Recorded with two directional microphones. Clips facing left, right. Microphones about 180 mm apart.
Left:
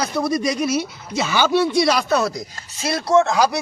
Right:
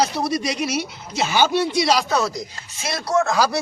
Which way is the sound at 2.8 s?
30° left (ahead or behind).